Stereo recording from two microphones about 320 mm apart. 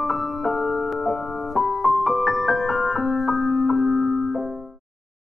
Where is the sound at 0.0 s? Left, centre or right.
Centre.